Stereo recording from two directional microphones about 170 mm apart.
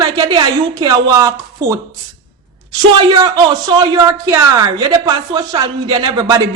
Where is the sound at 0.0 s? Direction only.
25° right (ahead or behind).